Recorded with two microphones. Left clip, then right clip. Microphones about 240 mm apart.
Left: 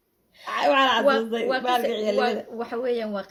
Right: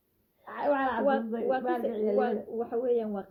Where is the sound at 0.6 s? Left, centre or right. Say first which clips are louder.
Left 8 dB; centre.